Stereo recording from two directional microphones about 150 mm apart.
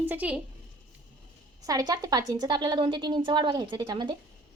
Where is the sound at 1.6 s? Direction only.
25° right (ahead or behind).